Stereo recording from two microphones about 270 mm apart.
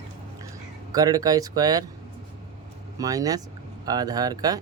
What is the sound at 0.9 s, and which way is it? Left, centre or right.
Speech, centre.